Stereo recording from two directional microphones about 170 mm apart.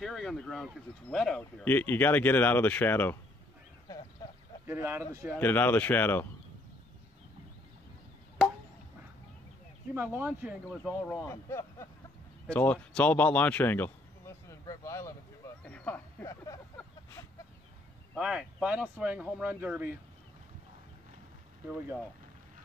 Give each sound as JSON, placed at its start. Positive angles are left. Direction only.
{"t": 0.0, "sound": "speech", "side_deg": 0}
{"t": 4.6, "sound": "speech", "side_deg": -15}
{"t": 5.4, "sound": "speech", "side_deg": 10}
{"t": 9.9, "sound": "speech", "side_deg": -10}
{"t": 11.1, "sound": "speech", "side_deg": 15}
{"t": 15.6, "sound": "a sound", "side_deg": 10}
{"t": 18.1, "sound": "speech", "side_deg": -5}